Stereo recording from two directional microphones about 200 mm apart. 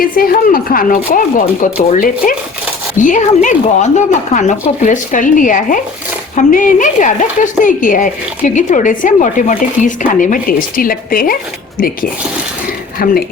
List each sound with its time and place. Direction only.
0.0 s a woman's voice: 45° left (ahead or behind)
13.0 s speech: 45° left (ahead or behind)